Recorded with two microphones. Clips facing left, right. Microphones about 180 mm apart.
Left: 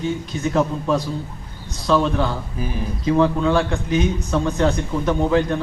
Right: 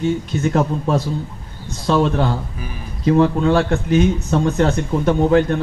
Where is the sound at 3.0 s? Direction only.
45° right (ahead or behind).